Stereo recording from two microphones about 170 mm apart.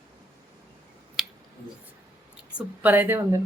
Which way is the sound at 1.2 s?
Centre (ahead or behind).